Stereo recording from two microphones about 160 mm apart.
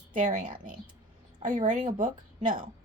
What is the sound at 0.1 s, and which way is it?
A woman's voice, 55° right (ahead or behind).